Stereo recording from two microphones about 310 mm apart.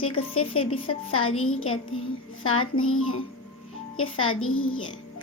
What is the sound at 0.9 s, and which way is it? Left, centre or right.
A woman's voice, left.